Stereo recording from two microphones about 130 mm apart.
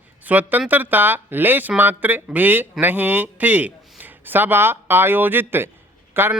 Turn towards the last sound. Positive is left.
turn(degrees=-15)  # may be behind; listen again after turning